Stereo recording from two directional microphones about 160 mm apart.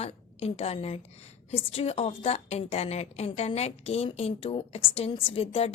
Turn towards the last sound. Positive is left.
turn(degrees=35)  # may be behind; listen again after turning